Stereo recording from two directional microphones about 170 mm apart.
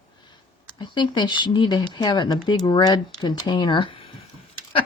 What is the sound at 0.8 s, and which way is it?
Speech, 25° left (ahead or behind).